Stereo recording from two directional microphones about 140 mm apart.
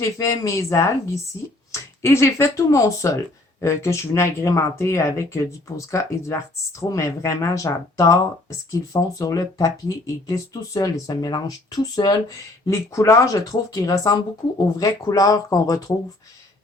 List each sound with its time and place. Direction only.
0.0 s speech: 25° left (ahead or behind)